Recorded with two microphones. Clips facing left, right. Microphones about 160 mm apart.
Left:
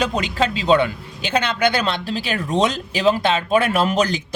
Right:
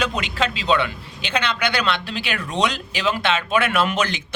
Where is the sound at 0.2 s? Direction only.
40° left (ahead or behind).